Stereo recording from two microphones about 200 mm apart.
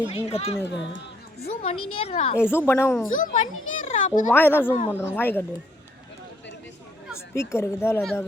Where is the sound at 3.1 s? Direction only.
40° left (ahead or behind).